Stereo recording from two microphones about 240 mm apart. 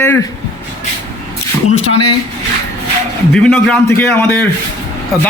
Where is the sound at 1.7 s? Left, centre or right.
Left.